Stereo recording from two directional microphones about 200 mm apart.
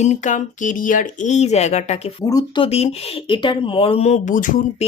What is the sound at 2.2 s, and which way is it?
Speech, 15° left (ahead or behind).